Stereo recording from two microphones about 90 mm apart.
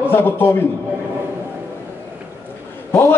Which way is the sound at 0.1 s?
25° left (ahead or behind).